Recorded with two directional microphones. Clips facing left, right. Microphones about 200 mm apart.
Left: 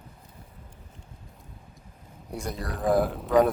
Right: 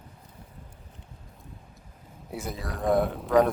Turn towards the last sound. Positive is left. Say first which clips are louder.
# even
turn(degrees=0)  # may be behind; listen again after turning